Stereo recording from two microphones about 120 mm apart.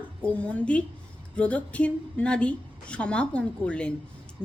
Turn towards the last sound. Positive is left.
turn(degrees=10)  # may be behind; listen again after turning